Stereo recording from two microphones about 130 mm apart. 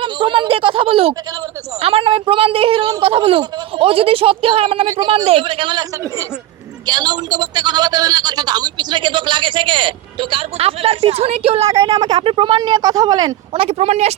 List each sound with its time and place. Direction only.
0.0 s a sound: 40° right (ahead or behind)
1.8 s a man's voice: 45° right (ahead or behind)
6.8 s a man's voice: 35° right (ahead or behind)
13.5 s speech: 50° right (ahead or behind)